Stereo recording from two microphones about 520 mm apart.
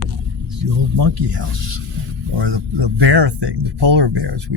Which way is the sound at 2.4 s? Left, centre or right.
Right.